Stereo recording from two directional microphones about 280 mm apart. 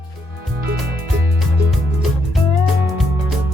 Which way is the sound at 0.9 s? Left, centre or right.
Right.